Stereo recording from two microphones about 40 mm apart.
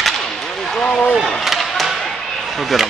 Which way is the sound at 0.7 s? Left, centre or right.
Left.